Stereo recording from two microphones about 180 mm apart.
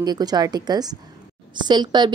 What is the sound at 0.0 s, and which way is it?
Speech, 20° right (ahead or behind).